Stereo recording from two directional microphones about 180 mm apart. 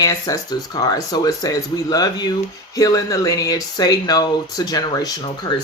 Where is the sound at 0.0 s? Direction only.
20° left (ahead or behind).